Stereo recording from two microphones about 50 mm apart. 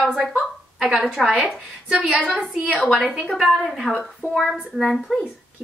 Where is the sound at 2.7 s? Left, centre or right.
Centre.